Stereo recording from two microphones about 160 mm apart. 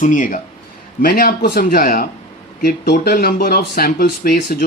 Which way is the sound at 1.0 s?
65° left (ahead or behind).